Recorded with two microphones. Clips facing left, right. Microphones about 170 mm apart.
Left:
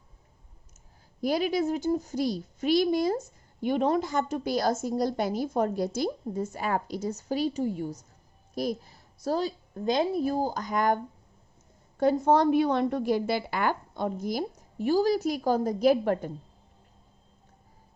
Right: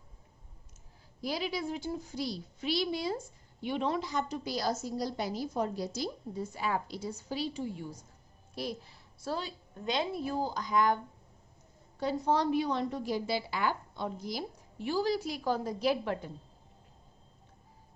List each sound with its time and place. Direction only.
1.2 s a woman's voice: 50° left (ahead or behind)